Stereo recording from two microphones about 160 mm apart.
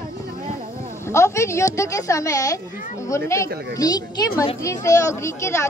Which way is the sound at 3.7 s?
25° left (ahead or behind).